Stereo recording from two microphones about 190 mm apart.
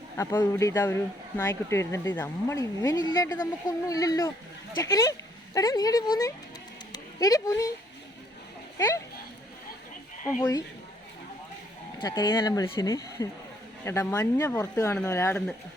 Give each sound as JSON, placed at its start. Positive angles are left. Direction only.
{"t": 0.2, "sound": "speech", "side_deg": 10}
{"t": 11.9, "sound": "speech", "side_deg": 25}